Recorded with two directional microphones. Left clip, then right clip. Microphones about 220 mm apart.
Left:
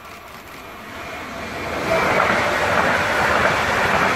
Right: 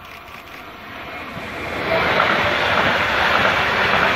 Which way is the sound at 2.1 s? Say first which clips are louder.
Right 2 dB; 35° right (ahead or behind).